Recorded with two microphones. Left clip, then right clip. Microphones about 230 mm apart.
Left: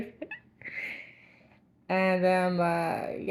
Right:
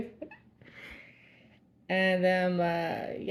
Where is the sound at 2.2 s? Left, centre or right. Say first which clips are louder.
Left 2 dB; left.